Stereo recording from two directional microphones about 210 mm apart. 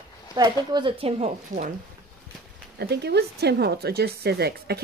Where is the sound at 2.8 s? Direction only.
50° right (ahead or behind).